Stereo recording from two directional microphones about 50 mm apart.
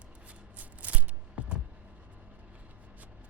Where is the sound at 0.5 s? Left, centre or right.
Right.